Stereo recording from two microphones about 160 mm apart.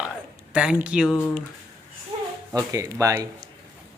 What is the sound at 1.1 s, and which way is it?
Speech, 15° left (ahead or behind).